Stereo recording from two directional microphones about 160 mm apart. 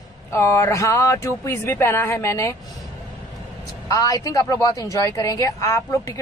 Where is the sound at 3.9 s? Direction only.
20° left (ahead or behind).